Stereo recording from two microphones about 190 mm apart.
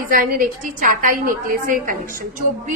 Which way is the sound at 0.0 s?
50° right (ahead or behind).